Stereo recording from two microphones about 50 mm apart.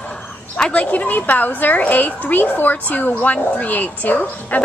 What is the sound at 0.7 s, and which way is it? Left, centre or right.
A woman's voice, left.